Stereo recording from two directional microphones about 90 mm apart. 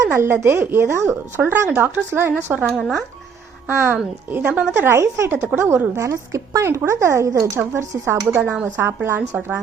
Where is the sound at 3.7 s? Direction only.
25° right (ahead or behind).